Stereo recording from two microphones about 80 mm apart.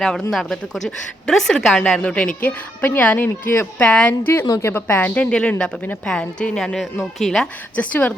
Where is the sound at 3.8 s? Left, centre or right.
Centre.